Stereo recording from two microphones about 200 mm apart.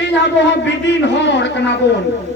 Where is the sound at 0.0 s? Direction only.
60° left (ahead or behind).